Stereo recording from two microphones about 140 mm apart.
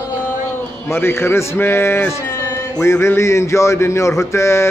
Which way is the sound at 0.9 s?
15° left (ahead or behind).